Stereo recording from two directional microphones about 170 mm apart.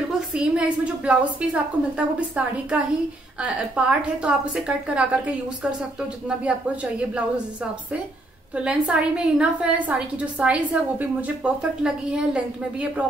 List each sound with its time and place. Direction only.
0.3 s a woman's voice: 5° right (ahead or behind)
8.6 s a woman's voice: 5° right (ahead or behind)